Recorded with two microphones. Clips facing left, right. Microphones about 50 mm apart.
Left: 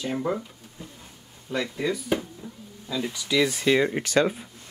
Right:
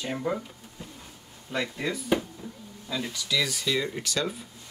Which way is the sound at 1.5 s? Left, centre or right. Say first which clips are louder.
Left 3 dB; centre.